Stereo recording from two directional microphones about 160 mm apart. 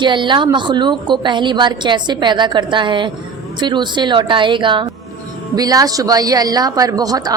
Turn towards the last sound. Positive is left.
turn(degrees=-25)  # may be behind; listen again after turning